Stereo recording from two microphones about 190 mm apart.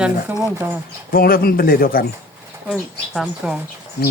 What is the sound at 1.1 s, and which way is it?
Speech, 50° left (ahead or behind).